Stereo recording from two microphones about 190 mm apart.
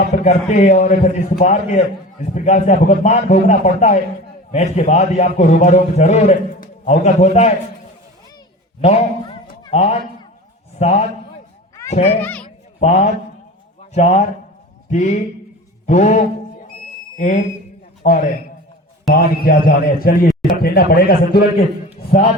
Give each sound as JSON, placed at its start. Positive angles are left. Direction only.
{"t": 0.0, "sound": "a man's voice", "side_deg": 40}
{"t": 8.8, "sound": "a man's voice", "side_deg": 35}
{"t": 12.2, "sound": "speech", "side_deg": 5}
{"t": 12.8, "sound": "a man's voice", "side_deg": 35}